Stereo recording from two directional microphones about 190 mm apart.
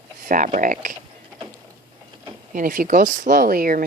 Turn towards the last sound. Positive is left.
turn(degrees=-45)  # may be behind; listen again after turning